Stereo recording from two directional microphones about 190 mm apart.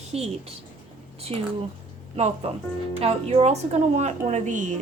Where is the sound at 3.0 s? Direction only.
30° right (ahead or behind).